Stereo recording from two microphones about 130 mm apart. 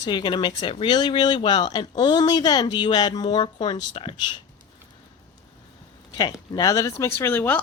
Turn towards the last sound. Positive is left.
turn(degrees=15)  # may be behind; listen again after turning